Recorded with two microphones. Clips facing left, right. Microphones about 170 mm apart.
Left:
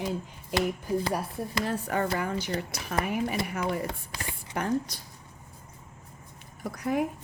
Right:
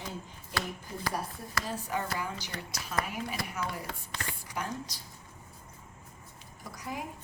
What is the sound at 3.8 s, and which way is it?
Speech, 15° left (ahead or behind).